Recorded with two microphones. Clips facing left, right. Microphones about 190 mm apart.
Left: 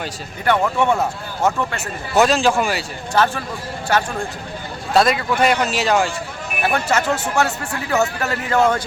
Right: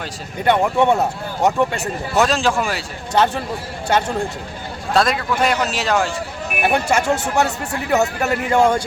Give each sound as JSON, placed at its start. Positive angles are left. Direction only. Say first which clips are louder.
{"t": 0.4, "sound": "speech", "louder": "right 2 dB", "side_deg": -15}
{"t": 2.1, "sound": "speech", "louder": "left 2 dB", "side_deg": 0}
{"t": 4.9, "sound": "speech", "louder": "left 2 dB", "side_deg": 0}
{"t": 6.6, "sound": "speech", "louder": "right 2 dB", "side_deg": -20}